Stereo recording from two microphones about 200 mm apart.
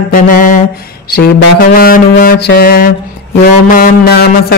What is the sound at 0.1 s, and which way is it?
Music, 40° left (ahead or behind).